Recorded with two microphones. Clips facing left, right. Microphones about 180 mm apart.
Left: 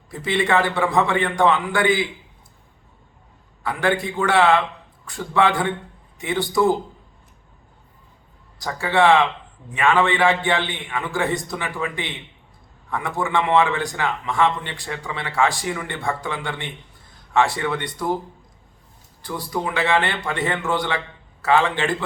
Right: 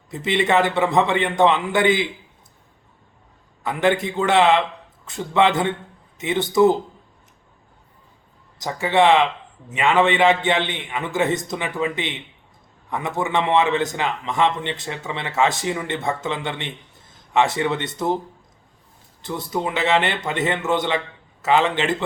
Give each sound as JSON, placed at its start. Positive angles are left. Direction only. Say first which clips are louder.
{"t": 0.1, "sound": "a man's voice", "louder": "right 1 dB", "side_deg": -20}
{"t": 3.6, "sound": "a man's voice", "louder": "right 2 dB", "side_deg": -20}
{"t": 8.5, "sound": "a man's voice", "louder": "right 2 dB", "side_deg": -20}
{"t": 19.2, "sound": "a man's voice", "louder": "right 1 dB", "side_deg": -20}